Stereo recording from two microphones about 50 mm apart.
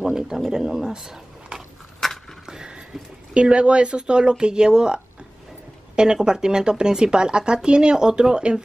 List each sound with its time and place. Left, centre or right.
0.0 s speech: centre
2.0 s a sound: centre
2.4 s speech: centre